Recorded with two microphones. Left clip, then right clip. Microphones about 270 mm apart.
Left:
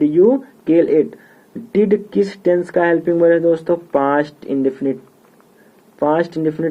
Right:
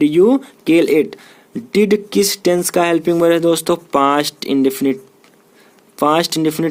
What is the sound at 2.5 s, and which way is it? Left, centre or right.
Speech, right.